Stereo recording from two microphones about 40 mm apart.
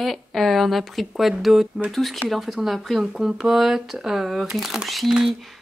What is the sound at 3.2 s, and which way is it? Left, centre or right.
Speech, centre.